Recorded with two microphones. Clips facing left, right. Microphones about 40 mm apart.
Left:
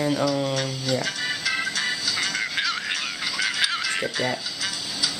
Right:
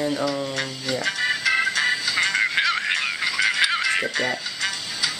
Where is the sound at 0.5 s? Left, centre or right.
Centre.